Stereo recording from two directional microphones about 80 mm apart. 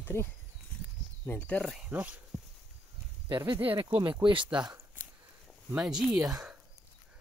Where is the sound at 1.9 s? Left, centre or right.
Right.